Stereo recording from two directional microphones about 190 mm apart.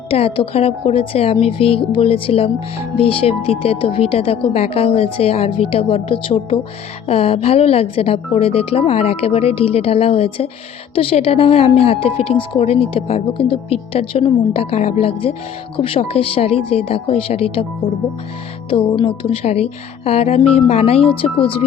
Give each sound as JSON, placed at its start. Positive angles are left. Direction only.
{"t": 0.1, "sound": "a woman's voice", "side_deg": 30}
{"t": 18.7, "sound": "a woman's voice", "side_deg": 25}